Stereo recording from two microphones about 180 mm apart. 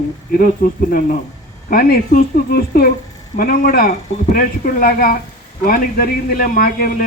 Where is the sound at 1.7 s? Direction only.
55° left (ahead or behind).